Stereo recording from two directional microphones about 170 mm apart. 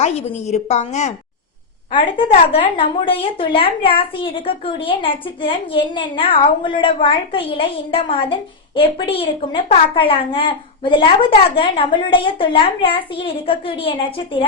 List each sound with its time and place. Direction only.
0.0 s a woman's voice: 40° left (ahead or behind)
2.1 s a woman's voice: 30° left (ahead or behind)